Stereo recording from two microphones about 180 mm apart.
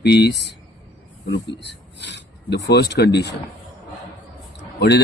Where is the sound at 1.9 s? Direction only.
70° left (ahead or behind).